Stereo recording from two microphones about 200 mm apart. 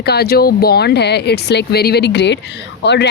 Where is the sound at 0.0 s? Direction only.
50° left (ahead or behind).